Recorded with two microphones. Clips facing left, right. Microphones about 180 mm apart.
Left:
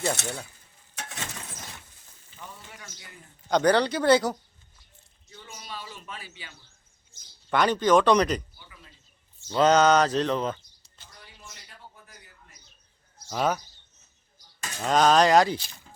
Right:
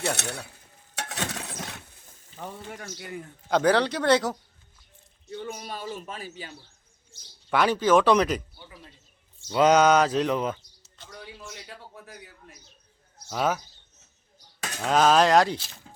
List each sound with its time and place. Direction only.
0.2 s speech: 65° right (ahead or behind)
0.9 s a sound: 75° right (ahead or behind)
2.6 s speech: 55° right (ahead or behind)
3.5 s speech: centre (ahead or behind)
5.3 s speech: 60° right (ahead or behind); by 6.5 s 40° right (ahead or behind)
7.5 s speech: 5° right (ahead or behind)
9.5 s a sound: 10° right (ahead or behind)
11.0 s a sound: 90° right
13.2 s speech: 5° right (ahead or behind)
14.8 s speech: 5° right (ahead or behind)